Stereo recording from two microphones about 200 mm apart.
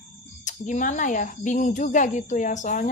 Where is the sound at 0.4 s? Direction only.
40° left (ahead or behind).